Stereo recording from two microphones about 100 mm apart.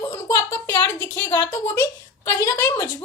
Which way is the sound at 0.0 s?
25° left (ahead or behind).